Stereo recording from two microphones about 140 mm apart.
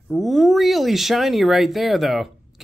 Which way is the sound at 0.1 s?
Centre (ahead or behind).